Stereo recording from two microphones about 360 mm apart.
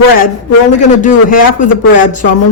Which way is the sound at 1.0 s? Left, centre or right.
Left.